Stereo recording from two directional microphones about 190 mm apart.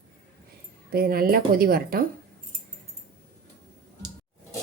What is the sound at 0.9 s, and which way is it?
Speech, 50° right (ahead or behind).